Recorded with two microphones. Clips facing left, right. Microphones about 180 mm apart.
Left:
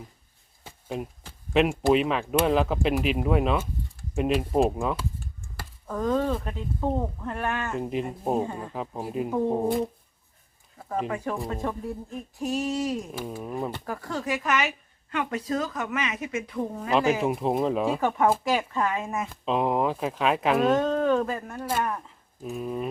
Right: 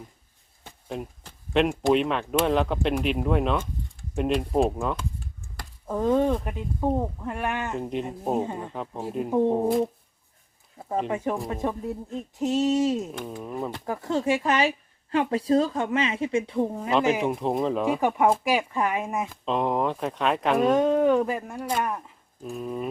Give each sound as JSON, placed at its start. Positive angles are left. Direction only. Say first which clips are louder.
{"t": 0.6, "sound": "speech", "louder": "left 1 dB", "side_deg": 0}
{"t": 5.9, "sound": "speech", "louder": "right 3 dB", "side_deg": -20}
{"t": 7.8, "sound": "speech", "louder": "left 1 dB", "side_deg": 5}
{"t": 8.4, "sound": "speech", "louder": "right 2 dB", "side_deg": -20}
{"t": 8.7, "sound": "speech", "louder": "even", "side_deg": 5}
{"t": 10.8, "sound": "a sound", "louder": "right 2 dB", "side_deg": -25}
{"t": 11.1, "sound": "speech", "louder": "right 2 dB", "side_deg": -20}
{"t": 13.1, "sound": "speech", "louder": "even", "side_deg": 5}
{"t": 13.8, "sound": "speech", "louder": "right 6 dB", "side_deg": -25}
{"t": 17.2, "sound": "speech", "louder": "even", "side_deg": 0}
{"t": 18.4, "sound": "speech", "louder": "right 1 dB", "side_deg": -10}
{"t": 19.3, "sound": "speech", "louder": "left 2 dB", "side_deg": 5}
{"t": 20.7, "sound": "speech", "louder": "right 3 dB", "side_deg": -15}
{"t": 22.4, "sound": "speech", "louder": "even", "side_deg": 0}